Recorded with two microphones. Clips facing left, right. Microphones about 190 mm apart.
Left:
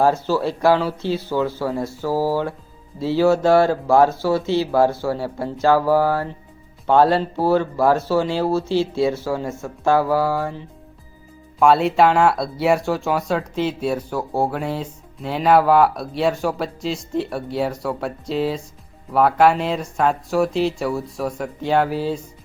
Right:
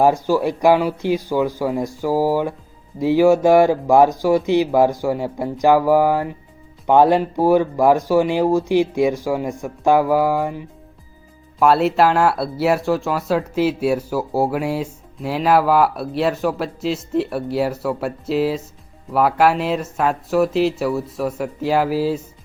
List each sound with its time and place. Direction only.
0.0 s speech: 15° right (ahead or behind)
11.6 s speech: 5° right (ahead or behind)